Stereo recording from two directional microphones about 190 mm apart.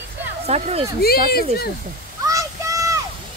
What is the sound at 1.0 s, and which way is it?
Speech, 55° left (ahead or behind).